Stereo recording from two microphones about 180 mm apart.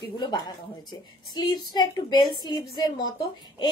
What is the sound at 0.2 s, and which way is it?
A woman's voice, 25° left (ahead or behind).